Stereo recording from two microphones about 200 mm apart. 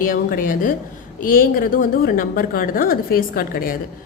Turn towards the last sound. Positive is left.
turn(degrees=45)  # may be behind; listen again after turning